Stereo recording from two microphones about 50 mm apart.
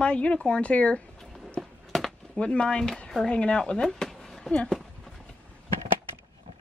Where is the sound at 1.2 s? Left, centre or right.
Centre.